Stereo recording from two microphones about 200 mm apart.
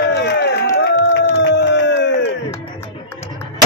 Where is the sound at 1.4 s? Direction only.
60° left (ahead or behind).